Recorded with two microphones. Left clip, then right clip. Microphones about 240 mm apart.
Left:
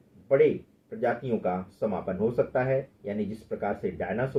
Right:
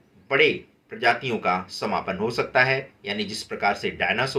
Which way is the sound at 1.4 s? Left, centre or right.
Right.